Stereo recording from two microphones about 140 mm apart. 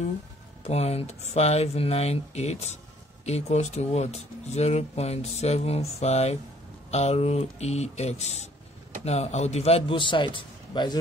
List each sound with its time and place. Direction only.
0.7 s speech: 45° left (ahead or behind)